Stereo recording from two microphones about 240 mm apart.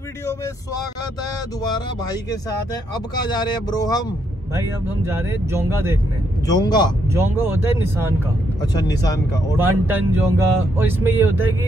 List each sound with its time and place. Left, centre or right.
3.2 s speech: centre
5.0 s speech: centre
6.4 s speech: centre
7.2 s speech: centre
8.8 s speech: centre
9.6 s speech: centre